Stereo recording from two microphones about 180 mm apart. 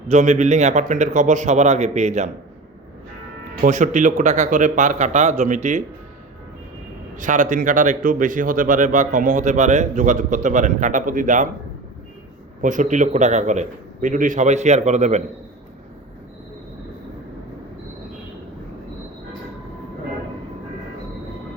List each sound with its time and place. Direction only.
0.1 s a man's voice: 40° right (ahead or behind)
3.6 s a man's voice: 45° right (ahead or behind)
7.2 s a man's voice: 45° right (ahead or behind)
12.6 s a man's voice: 45° right (ahead or behind)